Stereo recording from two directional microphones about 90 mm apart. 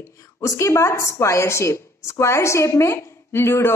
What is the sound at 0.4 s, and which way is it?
A woman's voice, 30° left (ahead or behind).